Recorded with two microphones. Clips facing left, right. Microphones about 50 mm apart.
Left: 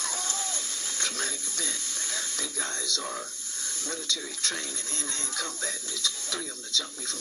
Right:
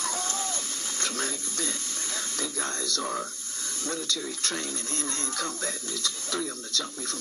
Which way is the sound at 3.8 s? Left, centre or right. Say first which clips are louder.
Right 3 dB; right.